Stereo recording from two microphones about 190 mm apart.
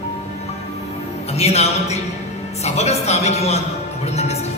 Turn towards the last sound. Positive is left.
turn(degrees=35)  # may be behind; listen again after turning